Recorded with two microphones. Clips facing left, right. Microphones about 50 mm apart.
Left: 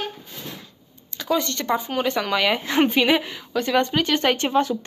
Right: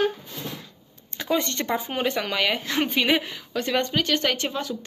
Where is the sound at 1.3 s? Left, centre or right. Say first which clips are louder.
Left 2 dB; centre.